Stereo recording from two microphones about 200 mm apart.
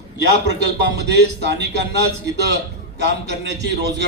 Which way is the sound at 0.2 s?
60° right (ahead or behind).